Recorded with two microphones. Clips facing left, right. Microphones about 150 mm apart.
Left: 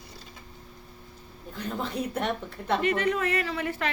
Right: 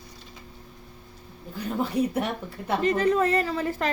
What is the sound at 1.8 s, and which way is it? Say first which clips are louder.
Speech: right 5 dB; 10° right (ahead or behind).